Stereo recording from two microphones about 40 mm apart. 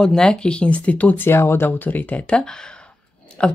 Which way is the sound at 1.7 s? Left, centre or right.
Left.